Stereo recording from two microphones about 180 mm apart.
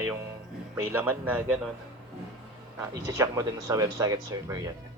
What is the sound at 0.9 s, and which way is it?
Speech, 10° right (ahead or behind).